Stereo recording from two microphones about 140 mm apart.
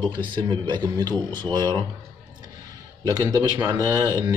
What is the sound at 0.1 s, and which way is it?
Speech, 35° right (ahead or behind).